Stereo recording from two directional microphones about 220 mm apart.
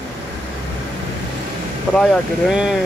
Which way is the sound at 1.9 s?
Centre (ahead or behind).